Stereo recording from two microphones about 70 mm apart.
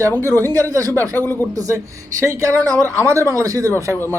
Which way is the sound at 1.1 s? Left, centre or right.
Left.